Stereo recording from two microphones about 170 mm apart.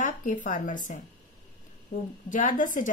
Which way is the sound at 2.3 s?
50° left (ahead or behind).